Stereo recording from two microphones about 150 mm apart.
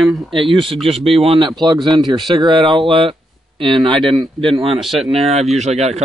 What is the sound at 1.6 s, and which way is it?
Speech, 25° right (ahead or behind).